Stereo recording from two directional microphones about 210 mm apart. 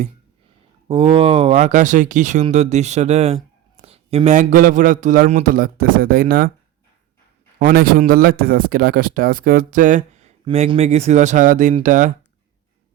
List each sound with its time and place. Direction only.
0.9 s speech: 25° right (ahead or behind); by 6.5 s 45° right (ahead or behind)
7.6 s speech: 45° right (ahead or behind)